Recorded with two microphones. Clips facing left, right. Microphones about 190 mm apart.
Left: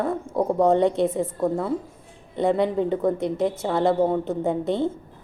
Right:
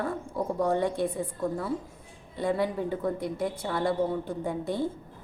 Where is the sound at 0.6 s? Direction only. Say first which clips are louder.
Left 8 dB; 25° left (ahead or behind).